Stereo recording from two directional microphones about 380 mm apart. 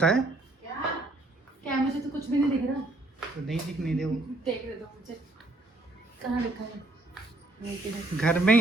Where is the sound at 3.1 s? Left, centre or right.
Centre.